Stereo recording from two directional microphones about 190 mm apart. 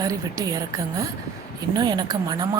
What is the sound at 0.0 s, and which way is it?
Speech, 20° right (ahead or behind).